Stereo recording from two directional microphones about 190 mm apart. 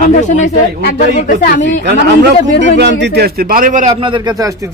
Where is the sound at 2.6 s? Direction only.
65° right (ahead or behind); by 3.9 s 40° right (ahead or behind).